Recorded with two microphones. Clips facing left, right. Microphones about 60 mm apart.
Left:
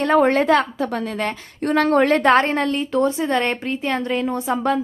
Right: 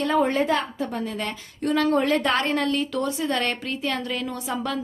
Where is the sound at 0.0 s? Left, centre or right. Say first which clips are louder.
Left 5 dB; left.